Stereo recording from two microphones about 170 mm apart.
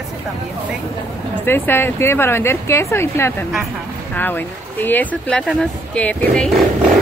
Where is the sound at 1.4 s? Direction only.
15° left (ahead or behind).